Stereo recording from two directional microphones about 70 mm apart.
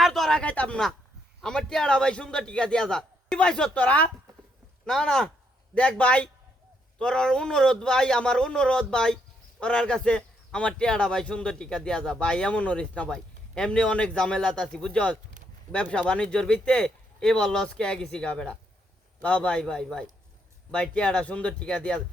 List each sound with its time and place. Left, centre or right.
0.0 s a sound: centre
0.4 s speech: centre
1.4 s a man's voice: centre